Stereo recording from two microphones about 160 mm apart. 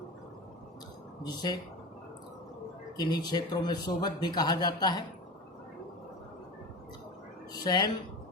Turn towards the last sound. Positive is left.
turn(degrees=25)  # may be behind; listen again after turning